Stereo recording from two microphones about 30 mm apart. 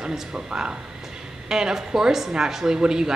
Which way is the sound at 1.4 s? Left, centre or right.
Centre.